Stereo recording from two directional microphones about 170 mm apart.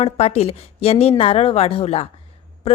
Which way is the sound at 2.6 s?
35° left (ahead or behind).